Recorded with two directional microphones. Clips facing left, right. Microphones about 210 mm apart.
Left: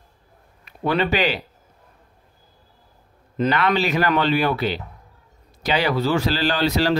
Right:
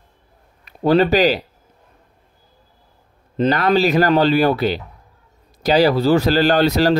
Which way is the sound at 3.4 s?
40° right (ahead or behind).